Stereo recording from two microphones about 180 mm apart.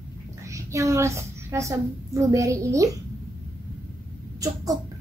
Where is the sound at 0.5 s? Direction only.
15° right (ahead or behind).